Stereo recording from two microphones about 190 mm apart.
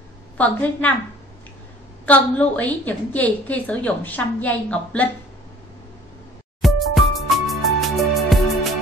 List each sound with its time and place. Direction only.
0.4 s a woman's voice: 10° left (ahead or behind)
2.0 s a woman's voice: 10° left (ahead or behind)
6.6 s music: centre (ahead or behind)